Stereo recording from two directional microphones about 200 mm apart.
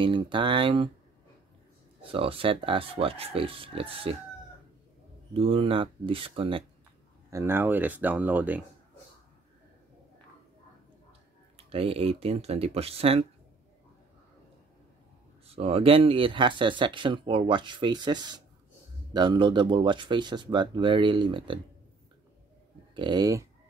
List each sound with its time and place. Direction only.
0.0 s speech: 25° right (ahead or behind)
2.0 s speech: 25° right (ahead or behind)
5.3 s speech: 30° right (ahead or behind)
7.2 s speech: 15° right (ahead or behind)
11.5 s speech: 30° right (ahead or behind)
15.4 s speech: 30° right (ahead or behind)
22.9 s speech: 20° right (ahead or behind)